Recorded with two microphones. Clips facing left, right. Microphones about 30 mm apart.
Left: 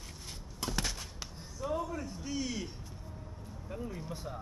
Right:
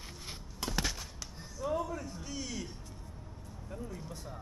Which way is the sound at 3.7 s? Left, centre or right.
Centre.